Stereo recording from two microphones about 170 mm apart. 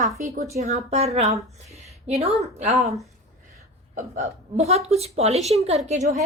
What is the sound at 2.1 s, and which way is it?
Speech, 35° right (ahead or behind).